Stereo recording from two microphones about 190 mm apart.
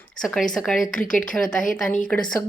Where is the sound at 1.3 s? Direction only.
5° left (ahead or behind).